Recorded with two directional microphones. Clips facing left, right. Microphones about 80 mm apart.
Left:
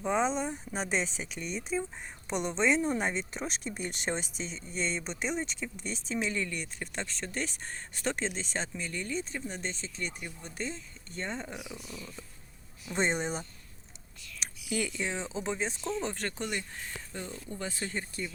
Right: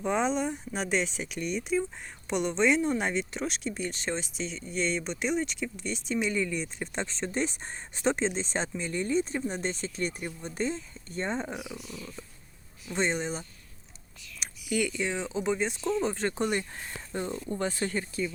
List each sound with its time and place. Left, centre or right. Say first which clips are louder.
0.0 s speech: right 2 dB; centre
3.7 s speech: right 2 dB; centre
6.9 s speech: right 5 dB; right
10.2 s speech: right 6 dB; right
11.7 s speech: right 3 dB; centre
12.9 s speech: right 1 dB; centre
14.7 s speech: right 4 dB; centre
16.4 s speech: right 6 dB; right